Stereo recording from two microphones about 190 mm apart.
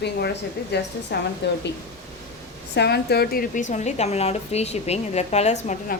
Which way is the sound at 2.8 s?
60° left (ahead or behind).